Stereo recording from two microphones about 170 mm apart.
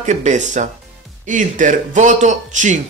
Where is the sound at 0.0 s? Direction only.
45° right (ahead or behind).